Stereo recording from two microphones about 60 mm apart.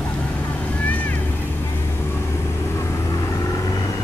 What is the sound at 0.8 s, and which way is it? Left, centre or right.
Boat, left.